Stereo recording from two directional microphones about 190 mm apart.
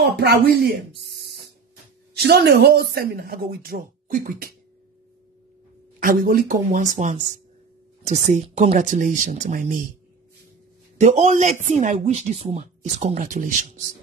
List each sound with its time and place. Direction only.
0.2 s speech: 60° right (ahead or behind)
5.9 s speech: 45° right (ahead or behind)
11.0 s speech: 35° right (ahead or behind)